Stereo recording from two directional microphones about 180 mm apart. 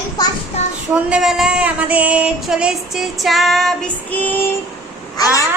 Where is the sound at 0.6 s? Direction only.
35° left (ahead or behind).